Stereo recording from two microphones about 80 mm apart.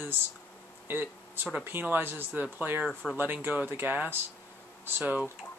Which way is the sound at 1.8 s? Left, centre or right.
Right.